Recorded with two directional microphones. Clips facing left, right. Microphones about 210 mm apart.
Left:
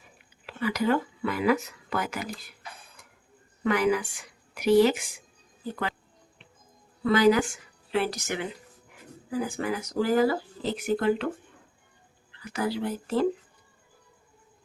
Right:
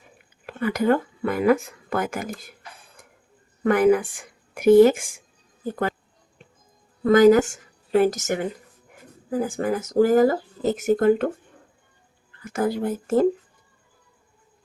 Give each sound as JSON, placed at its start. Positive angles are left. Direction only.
{"t": 0.4, "sound": "speech", "side_deg": -50}
{"t": 3.6, "sound": "speech", "side_deg": -50}
{"t": 7.0, "sound": "a woman's voice", "side_deg": -45}
{"t": 12.3, "sound": "speech", "side_deg": -45}